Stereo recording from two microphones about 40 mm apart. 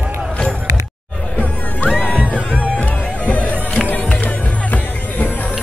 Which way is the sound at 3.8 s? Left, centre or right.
Left.